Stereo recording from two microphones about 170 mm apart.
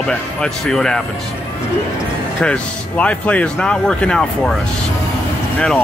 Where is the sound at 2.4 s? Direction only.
5° left (ahead or behind).